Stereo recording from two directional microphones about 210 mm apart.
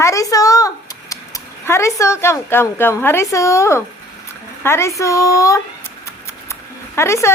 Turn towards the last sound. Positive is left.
turn(degrees=15)  # may be behind; listen again after turning